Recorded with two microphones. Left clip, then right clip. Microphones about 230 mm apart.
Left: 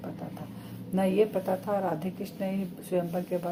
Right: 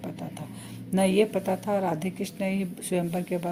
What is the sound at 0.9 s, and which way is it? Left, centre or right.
Speech, right.